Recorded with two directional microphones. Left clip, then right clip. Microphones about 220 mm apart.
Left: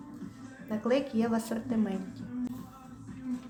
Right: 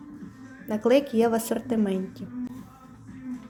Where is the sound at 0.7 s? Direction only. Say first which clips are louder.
Right 8 dB; 30° right (ahead or behind).